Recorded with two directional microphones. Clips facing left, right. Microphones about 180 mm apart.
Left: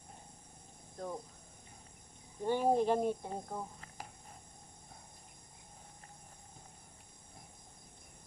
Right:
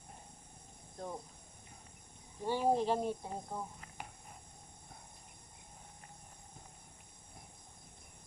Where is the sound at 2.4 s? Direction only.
50° left (ahead or behind).